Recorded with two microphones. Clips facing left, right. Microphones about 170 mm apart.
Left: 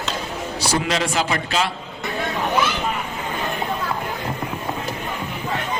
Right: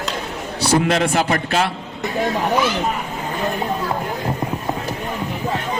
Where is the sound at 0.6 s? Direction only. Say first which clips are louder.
Right 6 dB; 55° right (ahead or behind).